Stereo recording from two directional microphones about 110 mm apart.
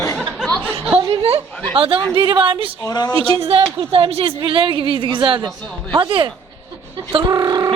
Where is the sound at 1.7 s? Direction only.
55° right (ahead or behind).